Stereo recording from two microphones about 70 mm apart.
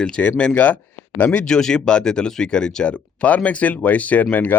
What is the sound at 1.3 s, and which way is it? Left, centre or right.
Speech, centre.